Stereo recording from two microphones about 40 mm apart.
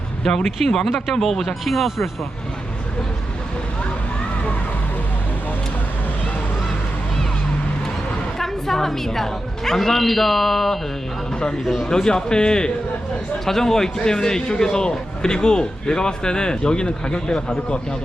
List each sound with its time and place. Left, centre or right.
0.3 s a man's voice: centre
8.4 s a man's voice: centre
11.6 s speech: centre
11.9 s a man's voice: centre